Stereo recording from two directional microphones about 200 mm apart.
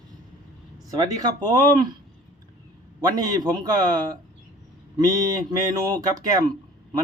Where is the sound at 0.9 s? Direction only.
20° right (ahead or behind).